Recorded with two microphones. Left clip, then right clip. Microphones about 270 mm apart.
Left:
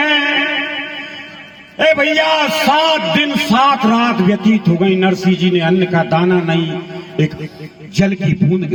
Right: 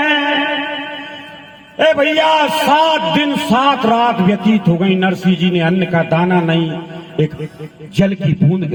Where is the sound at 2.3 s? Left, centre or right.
Right.